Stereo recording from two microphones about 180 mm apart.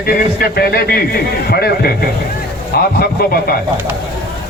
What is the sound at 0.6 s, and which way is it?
A man's voice, 60° left (ahead or behind).